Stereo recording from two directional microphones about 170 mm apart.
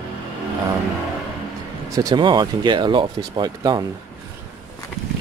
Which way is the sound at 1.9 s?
20° right (ahead or behind).